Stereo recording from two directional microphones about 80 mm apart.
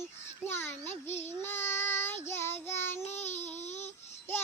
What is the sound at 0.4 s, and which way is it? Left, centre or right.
Child singing, left.